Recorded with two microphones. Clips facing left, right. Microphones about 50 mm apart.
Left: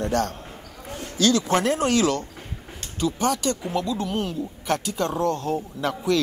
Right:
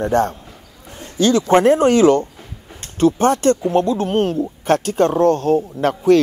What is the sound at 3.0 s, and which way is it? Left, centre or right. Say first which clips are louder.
Speech: right 9 dB; right.